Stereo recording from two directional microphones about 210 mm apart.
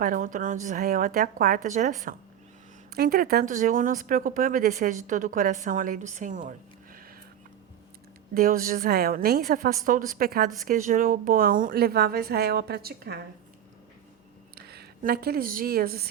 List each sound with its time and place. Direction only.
0.0 s speech: 40° right (ahead or behind)
8.3 s a woman's voice: 45° right (ahead or behind)
14.5 s a woman's voice: 50° right (ahead or behind)